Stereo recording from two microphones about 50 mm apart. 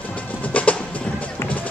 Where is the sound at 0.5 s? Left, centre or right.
Left.